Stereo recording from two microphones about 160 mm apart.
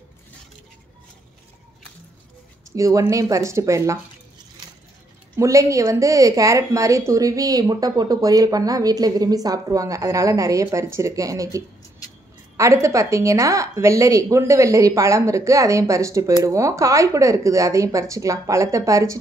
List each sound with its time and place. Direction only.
2.7 s a woman's voice: 20° right (ahead or behind)
5.3 s a woman's voice: 20° right (ahead or behind)